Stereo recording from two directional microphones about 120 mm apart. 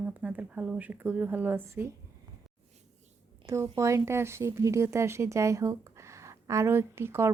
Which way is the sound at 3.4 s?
25° right (ahead or behind).